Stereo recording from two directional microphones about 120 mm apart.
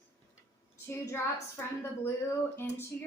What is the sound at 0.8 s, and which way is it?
Speech, 20° left (ahead or behind).